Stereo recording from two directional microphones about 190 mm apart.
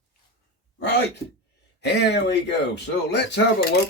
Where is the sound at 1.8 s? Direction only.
60° left (ahead or behind).